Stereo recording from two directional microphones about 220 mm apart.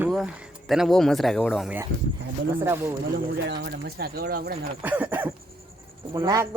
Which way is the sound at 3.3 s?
50° right (ahead or behind).